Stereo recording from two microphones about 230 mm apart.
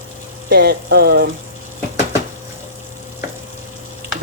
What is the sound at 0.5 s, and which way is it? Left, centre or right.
Speech, right.